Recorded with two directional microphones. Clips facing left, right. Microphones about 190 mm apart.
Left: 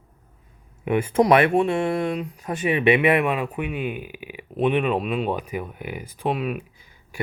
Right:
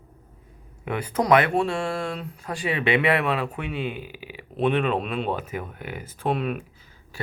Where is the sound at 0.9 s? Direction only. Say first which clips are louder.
Left 4 dB; 25° left (ahead or behind).